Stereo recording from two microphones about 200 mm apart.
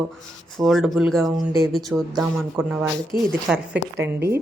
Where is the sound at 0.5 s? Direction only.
Centre (ahead or behind).